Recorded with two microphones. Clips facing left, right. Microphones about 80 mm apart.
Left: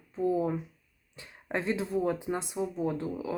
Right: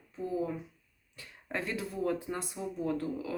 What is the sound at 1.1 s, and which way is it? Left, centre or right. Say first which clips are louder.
A woman's voice: left 4 dB; left.